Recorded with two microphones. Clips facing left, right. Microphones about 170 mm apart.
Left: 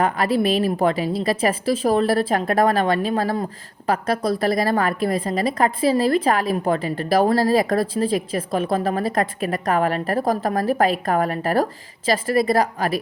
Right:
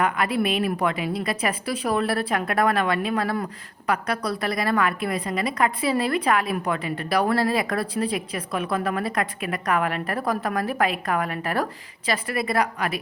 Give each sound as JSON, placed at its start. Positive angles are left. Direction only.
{"t": 0.0, "sound": "a woman's voice", "side_deg": 30}
{"t": 7.9, "sound": "a woman's voice", "side_deg": 30}
{"t": 9.2, "sound": "a woman's voice", "side_deg": 40}